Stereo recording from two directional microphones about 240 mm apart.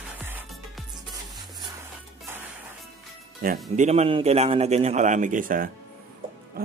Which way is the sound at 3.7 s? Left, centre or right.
Right.